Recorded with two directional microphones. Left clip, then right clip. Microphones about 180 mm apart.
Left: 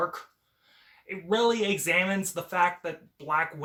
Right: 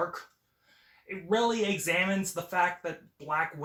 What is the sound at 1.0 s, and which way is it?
Speech, 20° left (ahead or behind).